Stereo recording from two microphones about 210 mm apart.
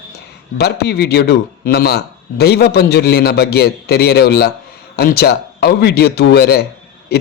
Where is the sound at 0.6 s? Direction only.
50° left (ahead or behind).